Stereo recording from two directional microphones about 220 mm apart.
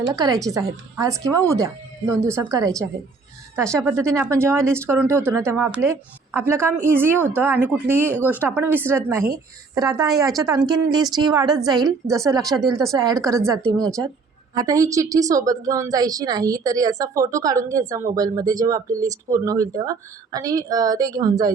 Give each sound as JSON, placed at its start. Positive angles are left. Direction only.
{"t": 0.0, "sound": "a woman's voice", "side_deg": -15}